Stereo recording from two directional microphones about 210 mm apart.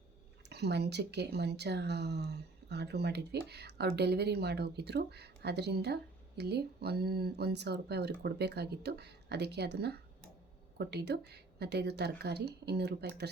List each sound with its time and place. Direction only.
0.5 s speech: 50° right (ahead or behind)